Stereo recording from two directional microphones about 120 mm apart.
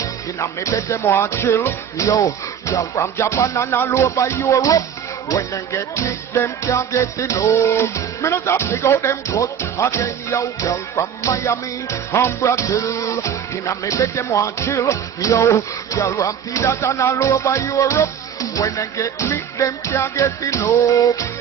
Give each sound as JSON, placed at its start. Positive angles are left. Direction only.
{"t": 0.0, "sound": "music", "side_deg": 25}